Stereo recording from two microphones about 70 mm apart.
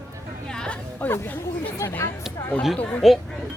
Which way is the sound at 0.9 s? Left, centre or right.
Left.